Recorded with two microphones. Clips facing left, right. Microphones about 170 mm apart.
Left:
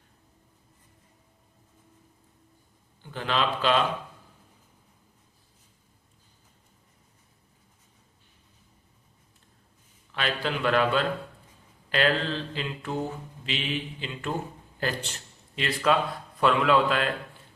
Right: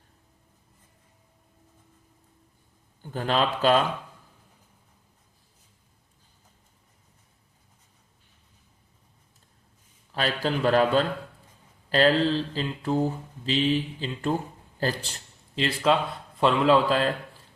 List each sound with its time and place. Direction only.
3.0 s speech: 40° right (ahead or behind)
10.1 s mantra: 35° right (ahead or behind)
14.8 s a man's voice: 35° right (ahead or behind)
16.4 s mantra: 30° right (ahead or behind)